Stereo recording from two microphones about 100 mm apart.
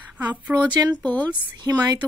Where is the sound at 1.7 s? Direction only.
30° right (ahead or behind).